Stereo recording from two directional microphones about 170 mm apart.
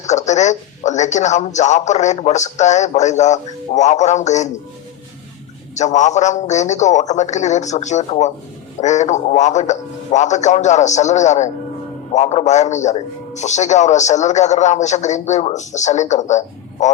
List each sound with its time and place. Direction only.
0.0 s speech: 45° left (ahead or behind)
5.7 s speech: 45° left (ahead or behind)